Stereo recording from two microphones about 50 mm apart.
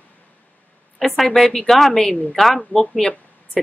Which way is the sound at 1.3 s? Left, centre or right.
Centre.